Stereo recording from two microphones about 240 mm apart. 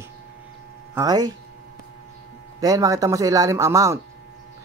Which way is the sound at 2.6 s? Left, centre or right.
Centre.